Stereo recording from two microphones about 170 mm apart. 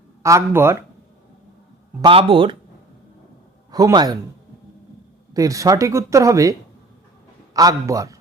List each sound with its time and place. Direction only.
0.2 s speech: 15° right (ahead or behind)
2.0 s speech: 30° right (ahead or behind)
3.7 s speech: 20° right (ahead or behind)
5.3 s speech: 20° right (ahead or behind)